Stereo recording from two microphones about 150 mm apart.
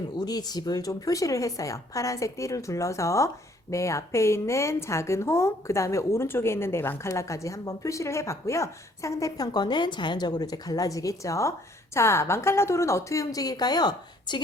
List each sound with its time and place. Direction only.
0.3 s a woman's voice: 25° left (ahead or behind)